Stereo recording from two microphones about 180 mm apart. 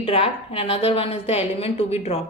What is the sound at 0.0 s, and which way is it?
A woman's voice, 35° left (ahead or behind).